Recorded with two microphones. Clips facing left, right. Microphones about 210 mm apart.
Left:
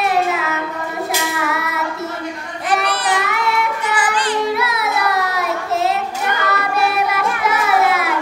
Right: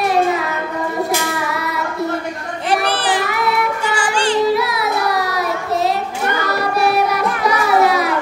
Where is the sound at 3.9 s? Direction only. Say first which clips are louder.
Right 2 dB; 30° right (ahead or behind).